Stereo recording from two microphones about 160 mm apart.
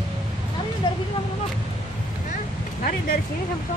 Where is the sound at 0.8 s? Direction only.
30° left (ahead or behind).